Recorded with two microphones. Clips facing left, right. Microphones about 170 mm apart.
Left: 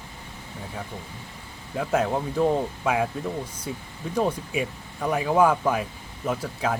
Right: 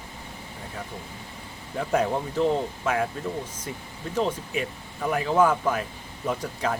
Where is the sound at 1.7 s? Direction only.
5° left (ahead or behind).